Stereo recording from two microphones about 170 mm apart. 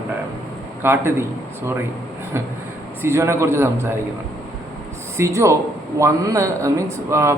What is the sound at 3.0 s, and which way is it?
Speech, 15° right (ahead or behind).